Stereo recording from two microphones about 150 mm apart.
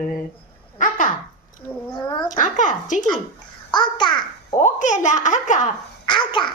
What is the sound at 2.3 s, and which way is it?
Speech, 60° left (ahead or behind).